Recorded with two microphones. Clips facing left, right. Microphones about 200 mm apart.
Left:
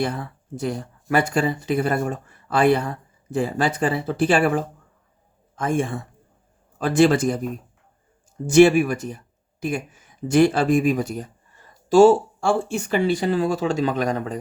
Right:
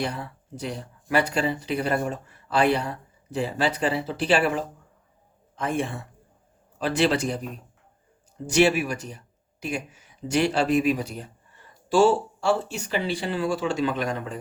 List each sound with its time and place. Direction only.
0.0 s speech: 50° left (ahead or behind)